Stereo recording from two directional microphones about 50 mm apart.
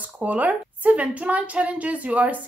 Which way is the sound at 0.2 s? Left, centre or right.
Right.